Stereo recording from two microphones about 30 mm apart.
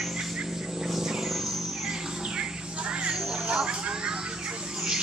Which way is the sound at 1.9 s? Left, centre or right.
Centre.